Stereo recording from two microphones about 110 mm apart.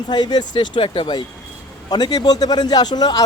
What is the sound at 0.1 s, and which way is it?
Speech, 40° left (ahead or behind).